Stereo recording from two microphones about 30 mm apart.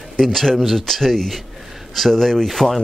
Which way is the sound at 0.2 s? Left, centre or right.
Centre.